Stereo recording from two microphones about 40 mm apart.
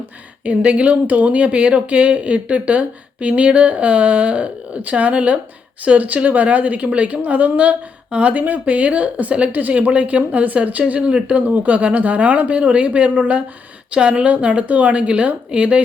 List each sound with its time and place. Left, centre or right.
0.4 s speech: right
11.0 s speech: right
11.4 s speech: right